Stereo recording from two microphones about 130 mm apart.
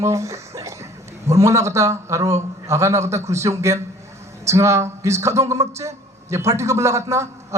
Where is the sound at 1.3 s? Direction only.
25° right (ahead or behind).